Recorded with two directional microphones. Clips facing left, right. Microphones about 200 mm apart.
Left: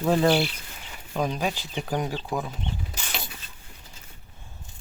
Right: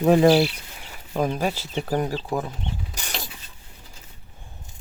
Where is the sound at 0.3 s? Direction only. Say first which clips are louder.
Right 5 dB; 35° right (ahead or behind).